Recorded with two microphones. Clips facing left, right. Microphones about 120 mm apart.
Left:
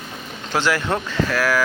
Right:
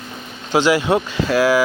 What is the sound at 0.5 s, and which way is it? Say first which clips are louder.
Speech: right 6 dB; 15° right (ahead or behind).